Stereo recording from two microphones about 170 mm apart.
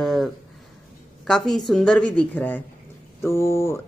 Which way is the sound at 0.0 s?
Centre (ahead or behind).